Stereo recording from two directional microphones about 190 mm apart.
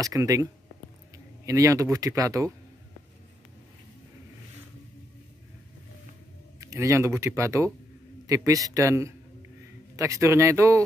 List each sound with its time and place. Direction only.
0.0 s speech: 15° right (ahead or behind)
6.6 s speech: 15° right (ahead or behind)